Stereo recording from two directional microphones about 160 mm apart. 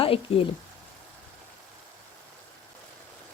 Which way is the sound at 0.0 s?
35° left (ahead or behind).